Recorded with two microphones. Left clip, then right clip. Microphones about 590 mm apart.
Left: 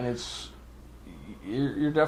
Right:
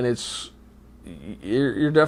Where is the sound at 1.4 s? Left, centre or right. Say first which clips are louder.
Right 7 dB; right.